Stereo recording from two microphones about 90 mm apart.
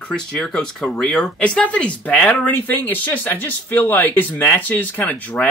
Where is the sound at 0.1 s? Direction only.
10° left (ahead or behind).